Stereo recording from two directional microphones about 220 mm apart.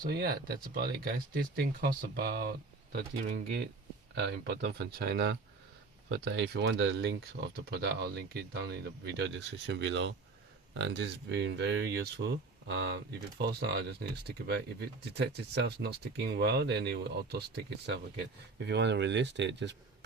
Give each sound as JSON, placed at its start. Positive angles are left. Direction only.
{"t": 0.0, "sound": "speech", "side_deg": -45}
{"t": 14.3, "sound": "speech", "side_deg": -50}